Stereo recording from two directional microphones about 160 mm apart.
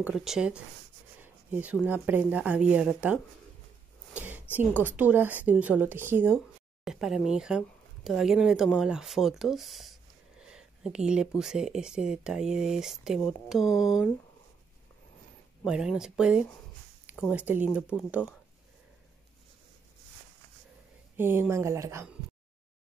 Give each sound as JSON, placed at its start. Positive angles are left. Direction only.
{"t": 0.0, "sound": "speech", "side_deg": -5}
{"t": 4.1, "sound": "a sound", "side_deg": -10}
{"t": 4.6, "sound": "speech", "side_deg": -10}
{"t": 6.3, "sound": "speech", "side_deg": 0}
{"t": 10.4, "sound": "a sound", "side_deg": -5}
{"t": 11.1, "sound": "speech", "side_deg": -5}
{"t": 15.6, "sound": "speech", "side_deg": -5}
{"t": 21.2, "sound": "speech", "side_deg": -15}